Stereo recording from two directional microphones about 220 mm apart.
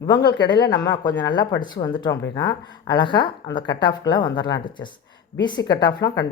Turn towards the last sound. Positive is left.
turn(degrees=15)  # may be behind; listen again after turning